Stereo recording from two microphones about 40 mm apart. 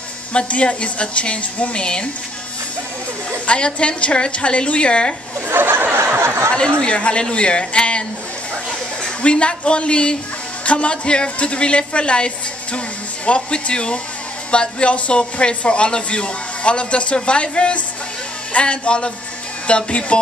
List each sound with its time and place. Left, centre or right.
0.3 s a man's voice: left
3.3 s a man's voice: left
5.5 s snicker: right
6.1 s a sound: right
6.8 s a man's voice: left
9.2 s a man's voice: left